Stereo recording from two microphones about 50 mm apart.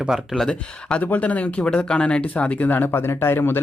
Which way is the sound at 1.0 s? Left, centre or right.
Left.